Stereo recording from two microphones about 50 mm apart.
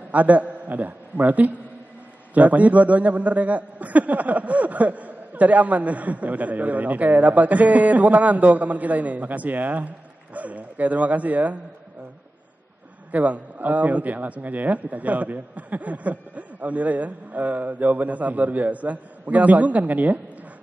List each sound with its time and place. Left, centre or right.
0.1 s a man's voice: right
13.1 s a man's voice: right